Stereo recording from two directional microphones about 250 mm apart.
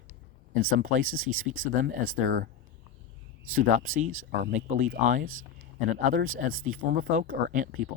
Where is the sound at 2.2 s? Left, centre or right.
Right.